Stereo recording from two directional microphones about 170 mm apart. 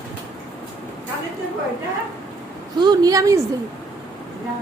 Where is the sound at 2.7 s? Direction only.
25° right (ahead or behind).